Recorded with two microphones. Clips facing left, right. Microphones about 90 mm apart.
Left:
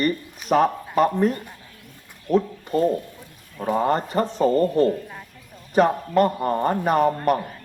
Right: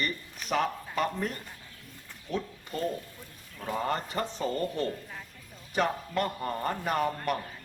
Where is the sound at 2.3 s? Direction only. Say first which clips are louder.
Left 13 dB; 35° left (ahead or behind).